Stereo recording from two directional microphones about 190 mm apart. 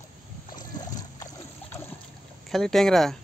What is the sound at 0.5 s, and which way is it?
Boat, 20° left (ahead or behind).